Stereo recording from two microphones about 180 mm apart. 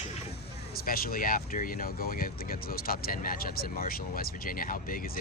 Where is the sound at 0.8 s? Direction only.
55° left (ahead or behind).